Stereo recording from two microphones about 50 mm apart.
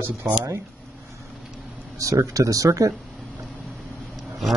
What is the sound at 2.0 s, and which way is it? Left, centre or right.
Speech, right.